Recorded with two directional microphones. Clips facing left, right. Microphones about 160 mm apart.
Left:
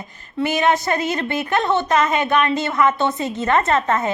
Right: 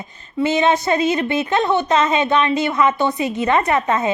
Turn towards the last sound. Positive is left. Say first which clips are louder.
# right 1 dB
turn(degrees=-15)  # may be behind; listen again after turning